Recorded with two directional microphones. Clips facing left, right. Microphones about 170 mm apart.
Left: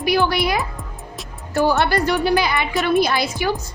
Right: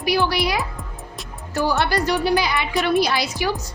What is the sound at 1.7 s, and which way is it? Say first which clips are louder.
A woman's voice: left 1 dB; 55° left (ahead or behind).